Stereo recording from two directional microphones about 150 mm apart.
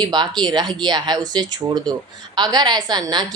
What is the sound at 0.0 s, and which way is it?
Speech, 30° right (ahead or behind).